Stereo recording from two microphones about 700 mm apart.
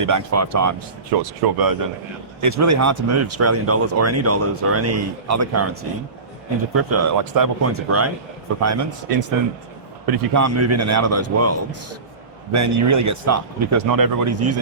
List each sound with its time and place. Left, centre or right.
0.0 s speech: right
6.7 s speech: right